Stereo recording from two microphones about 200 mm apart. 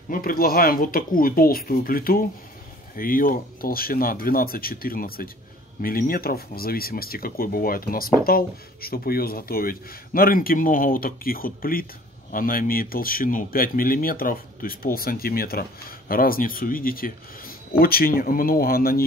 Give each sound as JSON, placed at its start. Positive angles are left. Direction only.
{"t": 0.1, "sound": "speech", "side_deg": 45}